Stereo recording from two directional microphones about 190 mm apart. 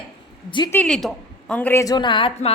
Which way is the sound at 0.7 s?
5° left (ahead or behind).